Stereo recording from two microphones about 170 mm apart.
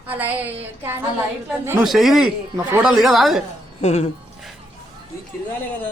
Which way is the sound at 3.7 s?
40° left (ahead or behind).